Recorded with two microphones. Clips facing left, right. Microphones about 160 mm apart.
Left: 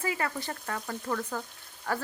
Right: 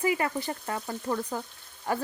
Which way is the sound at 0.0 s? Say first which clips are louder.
Right 5 dB; 15° right (ahead or behind).